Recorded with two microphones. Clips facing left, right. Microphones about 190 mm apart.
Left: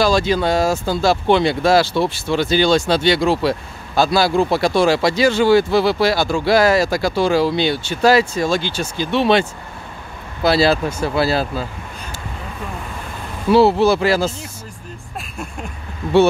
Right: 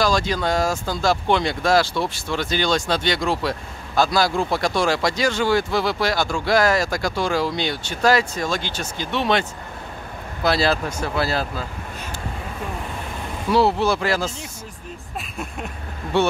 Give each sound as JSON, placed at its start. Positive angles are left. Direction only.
{"t": 0.0, "sound": "speech", "side_deg": 25}
{"t": 6.8, "sound": "speech", "side_deg": 5}
{"t": 7.1, "sound": "speech", "side_deg": 30}
{"t": 10.9, "sound": "speech", "side_deg": 5}
{"t": 11.2, "sound": "speech", "side_deg": 30}
{"t": 13.5, "sound": "speech", "side_deg": 30}
{"t": 13.9, "sound": "speech", "side_deg": 5}